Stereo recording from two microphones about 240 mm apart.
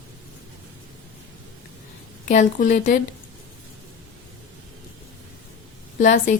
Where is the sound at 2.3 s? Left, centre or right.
Left.